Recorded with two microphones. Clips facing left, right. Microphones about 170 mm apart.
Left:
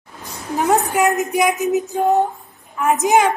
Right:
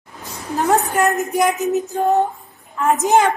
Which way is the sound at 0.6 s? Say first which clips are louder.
Even; 15° left (ahead or behind).